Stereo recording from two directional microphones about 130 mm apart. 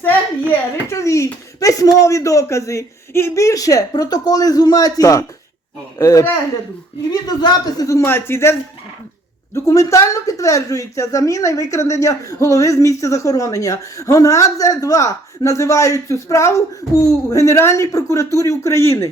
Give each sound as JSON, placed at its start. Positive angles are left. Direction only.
{"t": 0.9, "sound": "speech", "side_deg": 25}
{"t": 9.6, "sound": "speech", "side_deg": 25}